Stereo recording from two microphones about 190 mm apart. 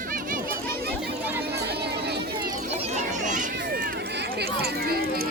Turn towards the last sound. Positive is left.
turn(degrees=-55)  # may be behind; listen again after turning